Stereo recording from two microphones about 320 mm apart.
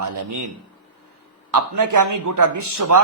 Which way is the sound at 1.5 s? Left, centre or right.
Right.